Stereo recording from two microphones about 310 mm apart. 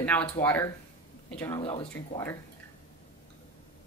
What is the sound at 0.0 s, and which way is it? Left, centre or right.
A woman's voice, centre.